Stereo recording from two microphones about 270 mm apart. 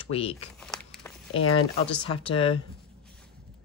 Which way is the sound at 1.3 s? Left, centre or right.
Left.